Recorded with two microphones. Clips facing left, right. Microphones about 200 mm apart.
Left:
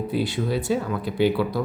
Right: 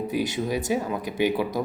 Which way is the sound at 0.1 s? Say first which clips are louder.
Left 2 dB; 15° right (ahead or behind).